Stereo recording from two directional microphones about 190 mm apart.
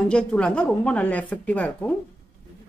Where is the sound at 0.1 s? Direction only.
5° left (ahead or behind).